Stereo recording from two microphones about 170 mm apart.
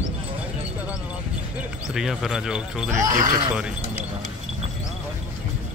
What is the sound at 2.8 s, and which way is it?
Speech, 20° right (ahead or behind).